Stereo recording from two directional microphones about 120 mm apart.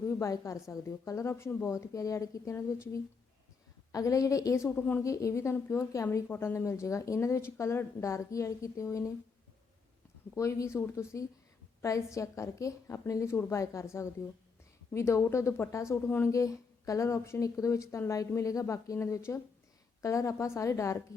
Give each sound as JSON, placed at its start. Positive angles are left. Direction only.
{"t": 0.0, "sound": "a woman's voice", "side_deg": 25}
{"t": 4.8, "sound": "a woman's voice", "side_deg": 15}
{"t": 5.0, "sound": "speech", "side_deg": 25}
{"t": 10.3, "sound": "speech", "side_deg": 25}